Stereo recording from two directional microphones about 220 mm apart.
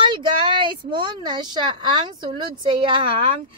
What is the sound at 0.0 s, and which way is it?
Speech, 20° right (ahead or behind).